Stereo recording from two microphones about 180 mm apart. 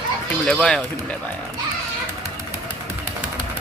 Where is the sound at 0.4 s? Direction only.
5° left (ahead or behind).